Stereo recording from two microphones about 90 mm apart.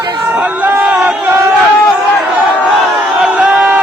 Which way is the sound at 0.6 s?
20° right (ahead or behind).